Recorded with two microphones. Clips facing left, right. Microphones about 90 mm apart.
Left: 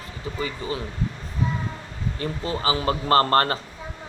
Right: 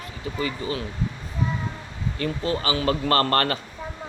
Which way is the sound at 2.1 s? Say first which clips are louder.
Right 3 dB; 25° left (ahead or behind).